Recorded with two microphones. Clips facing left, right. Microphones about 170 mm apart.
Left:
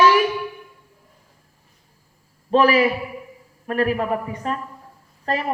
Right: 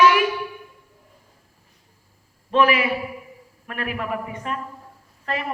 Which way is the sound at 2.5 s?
35° left (ahead or behind).